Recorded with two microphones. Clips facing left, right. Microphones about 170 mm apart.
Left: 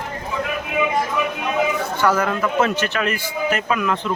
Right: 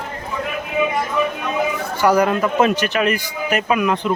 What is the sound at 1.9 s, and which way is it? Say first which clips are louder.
A man's voice: right 7 dB; 15° right (ahead or behind).